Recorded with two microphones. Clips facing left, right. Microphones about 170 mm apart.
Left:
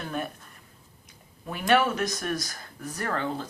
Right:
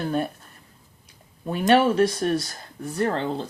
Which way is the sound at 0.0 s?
30° right (ahead or behind).